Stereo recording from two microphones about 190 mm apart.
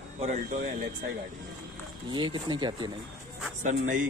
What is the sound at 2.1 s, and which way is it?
Speech, 25° right (ahead or behind).